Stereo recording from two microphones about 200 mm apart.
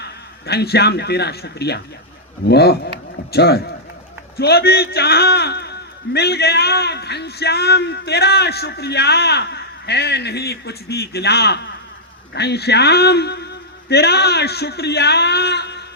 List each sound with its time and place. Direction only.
0.0 s a man's voice: 55° left (ahead or behind)